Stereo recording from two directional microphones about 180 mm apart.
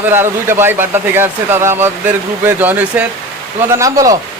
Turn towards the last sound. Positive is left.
turn(degrees=-20)  # may be behind; listen again after turning